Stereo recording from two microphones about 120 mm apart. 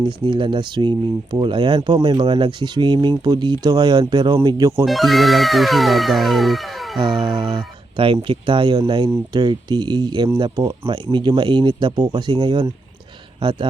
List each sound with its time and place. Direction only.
0.0 s speech: 45° right (ahead or behind)
4.9 s speech: centre (ahead or behind)
7.0 s a man's voice: 40° right (ahead or behind)